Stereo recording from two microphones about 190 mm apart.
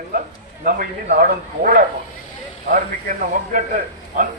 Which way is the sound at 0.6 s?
45° right (ahead or behind).